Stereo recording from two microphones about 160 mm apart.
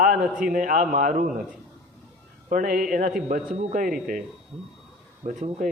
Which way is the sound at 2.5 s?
60° right (ahead or behind).